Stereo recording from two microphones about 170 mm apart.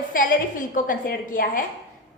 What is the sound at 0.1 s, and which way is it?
A woman's voice, 55° left (ahead or behind).